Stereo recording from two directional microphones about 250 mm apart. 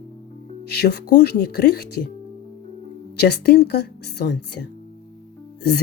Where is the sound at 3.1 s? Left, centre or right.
Left.